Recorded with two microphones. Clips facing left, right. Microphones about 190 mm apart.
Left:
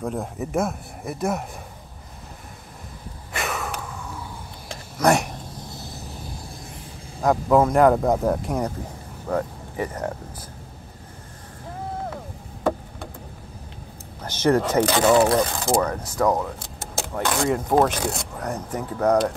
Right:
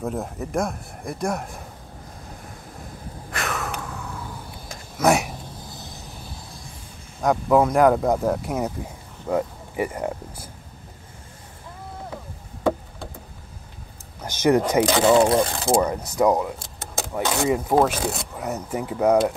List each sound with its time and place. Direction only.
0.0 s speech: 5° right (ahead or behind)
3.3 s snort: centre (ahead or behind)
4.9 s a sound: centre (ahead or behind)
7.2 s speech: centre (ahead or behind)
14.2 s speech: 15° right (ahead or behind)
15.8 s speech: 15° right (ahead or behind)